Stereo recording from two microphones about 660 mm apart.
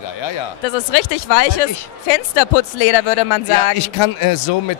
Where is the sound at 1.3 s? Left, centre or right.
Left.